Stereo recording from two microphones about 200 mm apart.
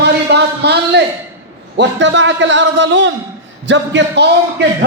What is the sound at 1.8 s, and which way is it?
Speech, 65° right (ahead or behind).